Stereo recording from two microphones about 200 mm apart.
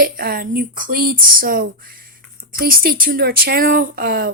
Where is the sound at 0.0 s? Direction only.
45° right (ahead or behind).